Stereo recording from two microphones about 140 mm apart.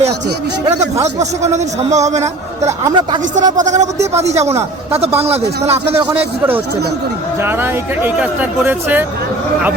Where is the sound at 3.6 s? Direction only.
60° right (ahead or behind).